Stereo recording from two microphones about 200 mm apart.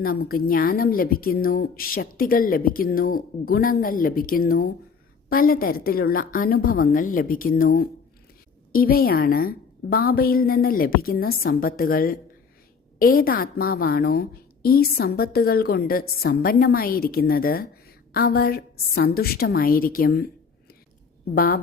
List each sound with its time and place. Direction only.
0.0 s a woman's voice: 50° left (ahead or behind)
21.3 s a woman's voice: 50° left (ahead or behind)